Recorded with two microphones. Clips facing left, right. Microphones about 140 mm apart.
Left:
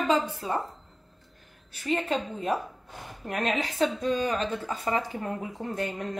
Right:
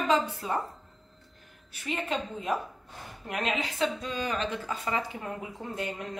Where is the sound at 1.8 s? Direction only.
35° left (ahead or behind).